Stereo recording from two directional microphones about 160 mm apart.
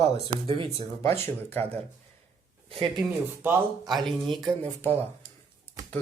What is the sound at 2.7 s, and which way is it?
Speech, 30° right (ahead or behind).